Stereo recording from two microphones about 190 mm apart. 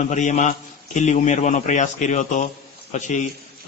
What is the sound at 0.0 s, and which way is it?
A man's voice, 40° left (ahead or behind).